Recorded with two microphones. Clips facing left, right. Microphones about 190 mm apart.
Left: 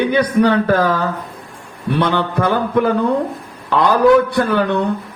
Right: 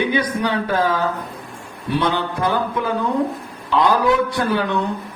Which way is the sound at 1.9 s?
60° left (ahead or behind).